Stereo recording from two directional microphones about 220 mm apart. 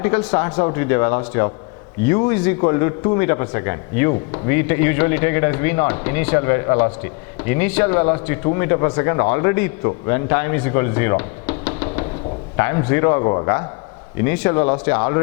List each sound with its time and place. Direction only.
0.0 s speech: 15° left (ahead or behind)